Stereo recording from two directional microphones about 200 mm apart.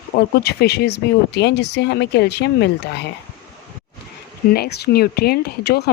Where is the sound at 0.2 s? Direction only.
55° left (ahead or behind).